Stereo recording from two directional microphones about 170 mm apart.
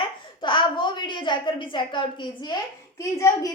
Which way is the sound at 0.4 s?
30° left (ahead or behind).